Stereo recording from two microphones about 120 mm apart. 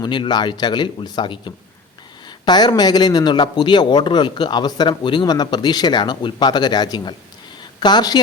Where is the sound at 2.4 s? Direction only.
40° left (ahead or behind).